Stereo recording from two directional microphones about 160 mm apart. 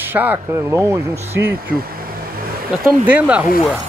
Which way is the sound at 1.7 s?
65° right (ahead or behind).